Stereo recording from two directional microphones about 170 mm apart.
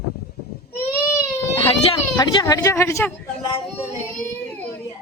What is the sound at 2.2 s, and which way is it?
Speech, 20° left (ahead or behind).